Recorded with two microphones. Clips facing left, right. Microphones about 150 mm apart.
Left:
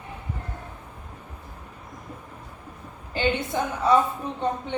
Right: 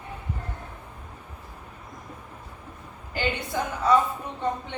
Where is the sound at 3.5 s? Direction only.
20° left (ahead or behind).